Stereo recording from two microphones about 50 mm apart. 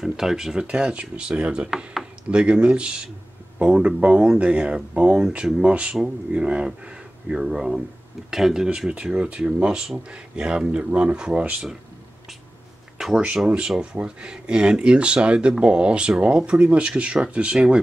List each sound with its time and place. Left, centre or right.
0.2 s speech: centre
0.7 s speech: right; by 8.6 s centre
8.6 s speech: centre
13.6 s speech: centre